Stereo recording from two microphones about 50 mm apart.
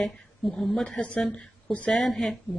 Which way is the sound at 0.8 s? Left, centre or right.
Left.